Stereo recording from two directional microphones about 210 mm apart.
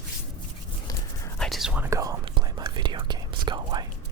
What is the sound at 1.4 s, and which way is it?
Whispering, centre (ahead or behind).